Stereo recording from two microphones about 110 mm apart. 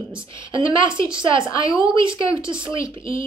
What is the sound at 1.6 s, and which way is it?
Speech, 30° left (ahead or behind).